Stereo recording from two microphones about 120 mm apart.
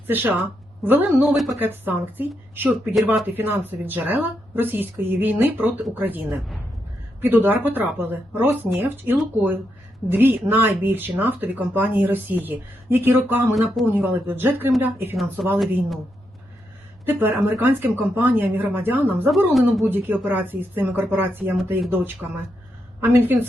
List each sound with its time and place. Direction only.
0.1 s speech: 15° right (ahead or behind)
13.5 s speech: centre (ahead or behind)
13.9 s speech: 15° right (ahead or behind)
15.1 s speech: centre (ahead or behind)
17.1 s a woman's voice: 15° right (ahead or behind)